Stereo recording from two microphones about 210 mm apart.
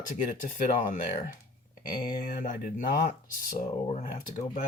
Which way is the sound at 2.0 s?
45° left (ahead or behind).